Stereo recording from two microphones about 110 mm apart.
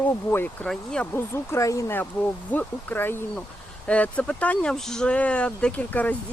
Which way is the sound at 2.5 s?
20° left (ahead or behind).